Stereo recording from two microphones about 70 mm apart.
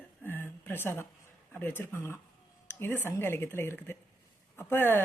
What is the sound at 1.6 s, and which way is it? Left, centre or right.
A woman's voice, left.